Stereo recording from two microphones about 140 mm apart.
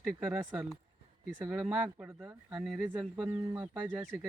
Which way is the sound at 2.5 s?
Centre (ahead or behind).